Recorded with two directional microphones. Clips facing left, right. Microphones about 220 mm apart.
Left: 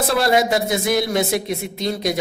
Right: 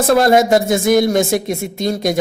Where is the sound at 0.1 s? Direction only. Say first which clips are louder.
Right 7 dB; 45° right (ahead or behind).